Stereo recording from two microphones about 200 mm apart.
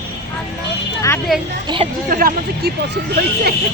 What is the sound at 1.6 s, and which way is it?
Speech, 25° right (ahead or behind).